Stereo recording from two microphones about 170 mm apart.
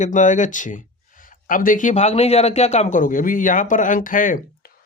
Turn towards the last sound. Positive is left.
turn(degrees=55)  # may be behind; listen again after turning